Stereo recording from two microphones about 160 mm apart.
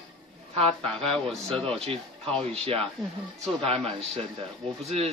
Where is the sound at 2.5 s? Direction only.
40° right (ahead or behind).